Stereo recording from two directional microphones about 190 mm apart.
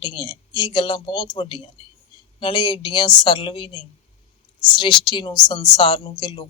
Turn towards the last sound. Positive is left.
turn(degrees=25)  # may be behind; listen again after turning